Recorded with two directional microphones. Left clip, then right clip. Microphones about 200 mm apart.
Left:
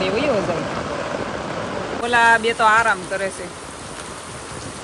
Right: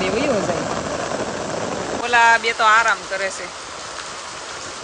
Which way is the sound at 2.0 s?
Centre (ahead or behind).